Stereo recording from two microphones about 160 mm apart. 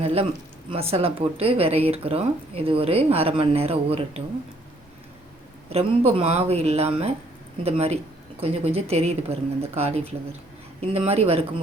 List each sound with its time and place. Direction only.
0.0 s speech: 40° right (ahead or behind)
5.6 s speech: 40° right (ahead or behind)